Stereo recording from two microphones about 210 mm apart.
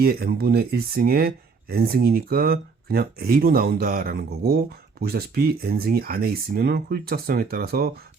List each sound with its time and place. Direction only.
0.0 s speech: 45° right (ahead or behind)